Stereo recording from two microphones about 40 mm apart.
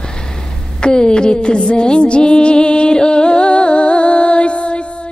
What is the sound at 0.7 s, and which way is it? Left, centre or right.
Music, left.